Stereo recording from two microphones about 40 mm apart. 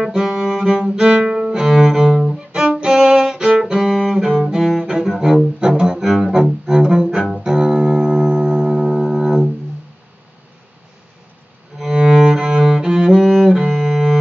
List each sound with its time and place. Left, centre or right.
0.0 s music: centre
0.7 s cello: centre
2.2 s music: centre
4.0 s cello: centre
4.6 s music: centre
6.0 s music: centre
6.4 s cello: centre
7.4 s music: centre
11.9 s cello: centre